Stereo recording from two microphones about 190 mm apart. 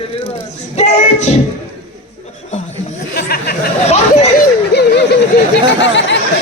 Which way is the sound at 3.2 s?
55° left (ahead or behind).